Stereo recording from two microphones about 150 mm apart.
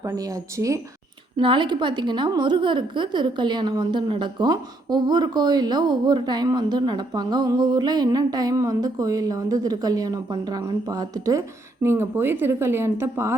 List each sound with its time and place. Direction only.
0.0 s a woman's voice: 20° right (ahead or behind)
1.4 s a woman's voice: 35° right (ahead or behind); by 13.3 s 15° right (ahead or behind)